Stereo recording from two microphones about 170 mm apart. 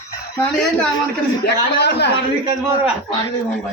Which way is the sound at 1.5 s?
75° left (ahead or behind).